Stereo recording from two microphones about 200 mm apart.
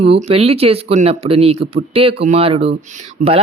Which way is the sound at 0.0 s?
30° right (ahead or behind).